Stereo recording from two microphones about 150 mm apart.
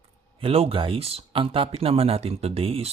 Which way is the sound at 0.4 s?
40° right (ahead or behind).